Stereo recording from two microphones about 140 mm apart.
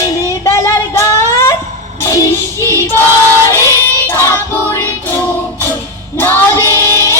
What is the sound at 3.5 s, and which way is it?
Music, 20° left (ahead or behind).